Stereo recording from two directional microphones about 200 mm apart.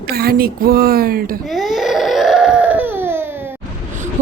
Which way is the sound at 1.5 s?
Centre (ahead or behind).